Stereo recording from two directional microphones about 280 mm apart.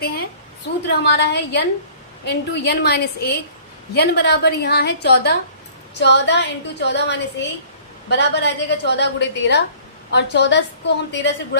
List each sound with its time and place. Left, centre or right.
1.0 s a woman's voice: left